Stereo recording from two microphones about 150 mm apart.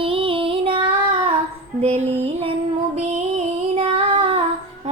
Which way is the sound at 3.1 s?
45° right (ahead or behind).